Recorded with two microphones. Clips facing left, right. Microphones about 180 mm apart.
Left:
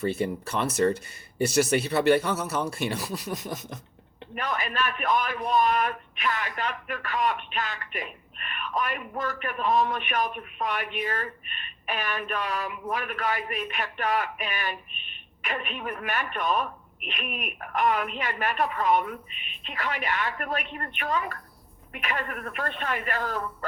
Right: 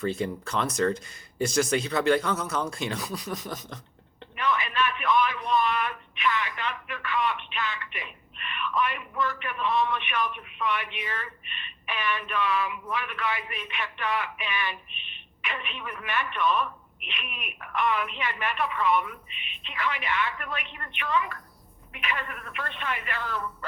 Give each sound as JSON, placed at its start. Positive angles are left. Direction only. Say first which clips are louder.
{"t": 0.0, "sound": "speech", "louder": "left 2 dB", "side_deg": 5}
{"t": 4.4, "sound": "a man's voice", "louder": "right 2 dB", "side_deg": 40}